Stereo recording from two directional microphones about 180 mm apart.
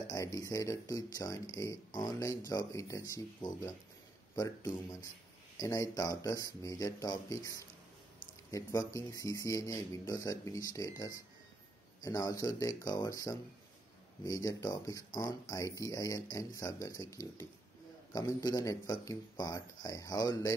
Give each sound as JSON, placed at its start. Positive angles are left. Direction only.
{"t": 0.1, "sound": "speech", "side_deg": 20}